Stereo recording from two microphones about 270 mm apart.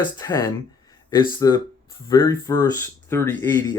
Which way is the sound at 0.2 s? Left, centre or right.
Centre.